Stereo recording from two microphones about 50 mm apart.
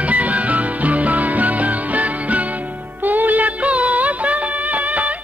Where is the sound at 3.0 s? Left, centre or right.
Right.